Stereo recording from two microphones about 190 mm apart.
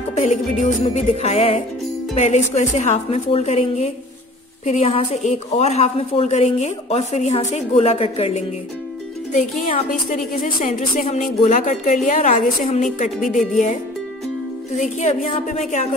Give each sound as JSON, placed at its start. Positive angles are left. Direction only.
{"t": 0.1, "sound": "a woman's voice", "side_deg": 40}
{"t": 9.6, "sound": "a woman's voice", "side_deg": 45}
{"t": 14.8, "sound": "a woman's voice", "side_deg": 40}